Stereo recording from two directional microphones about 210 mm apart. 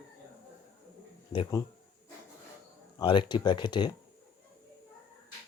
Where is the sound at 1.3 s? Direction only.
25° left (ahead or behind).